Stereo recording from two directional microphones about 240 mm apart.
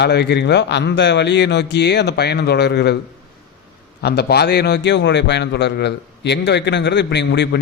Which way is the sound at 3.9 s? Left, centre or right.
Left.